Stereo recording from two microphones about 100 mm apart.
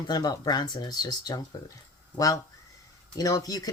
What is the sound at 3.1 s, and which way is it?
Speech, 35° left (ahead or behind).